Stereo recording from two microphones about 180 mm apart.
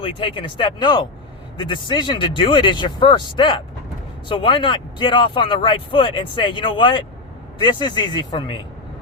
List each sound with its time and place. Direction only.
0.0 s speech: 30° left (ahead or behind)